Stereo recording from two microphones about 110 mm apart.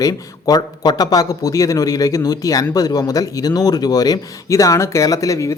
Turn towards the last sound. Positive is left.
turn(degrees=30)  # may be behind; listen again after turning